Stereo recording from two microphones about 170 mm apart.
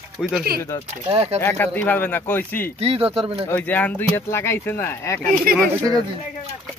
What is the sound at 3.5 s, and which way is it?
Speech, 10° left (ahead or behind).